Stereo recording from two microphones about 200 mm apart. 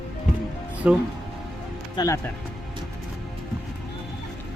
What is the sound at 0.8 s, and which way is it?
Speech, 5° right (ahead or behind).